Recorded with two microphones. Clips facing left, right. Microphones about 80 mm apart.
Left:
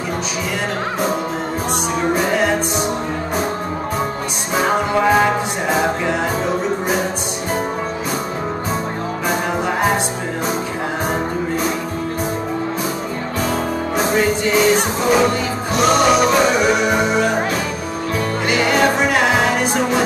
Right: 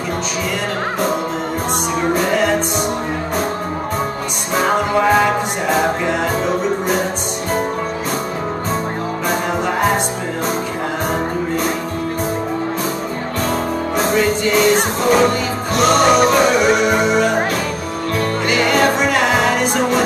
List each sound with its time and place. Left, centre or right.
4.6 s music: centre
9.3 s music: centre
13.5 s music: centre
17.1 s music: centre
18.5 s music: centre